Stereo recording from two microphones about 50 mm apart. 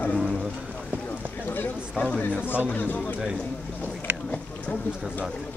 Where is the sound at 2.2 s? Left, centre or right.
Left.